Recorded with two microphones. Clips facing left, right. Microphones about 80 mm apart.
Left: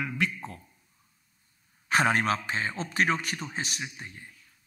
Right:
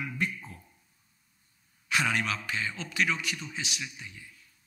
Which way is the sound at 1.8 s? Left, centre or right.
Left.